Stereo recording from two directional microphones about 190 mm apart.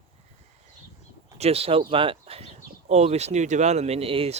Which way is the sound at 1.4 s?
30° right (ahead or behind).